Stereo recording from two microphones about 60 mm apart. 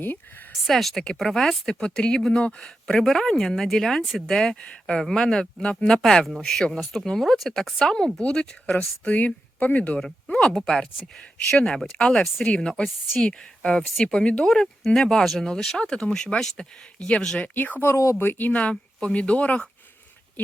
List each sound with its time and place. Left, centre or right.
0.6 s speech: centre
8.2 s speech: centre
10.0 s speech: centre
17.5 s speech: left
17.9 s speech: left
18.2 s speech: left